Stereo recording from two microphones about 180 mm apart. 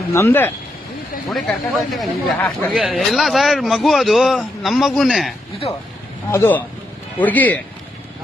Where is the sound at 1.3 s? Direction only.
Centre (ahead or behind).